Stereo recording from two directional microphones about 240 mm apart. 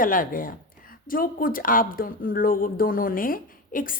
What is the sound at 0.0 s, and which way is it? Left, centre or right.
Speech, left.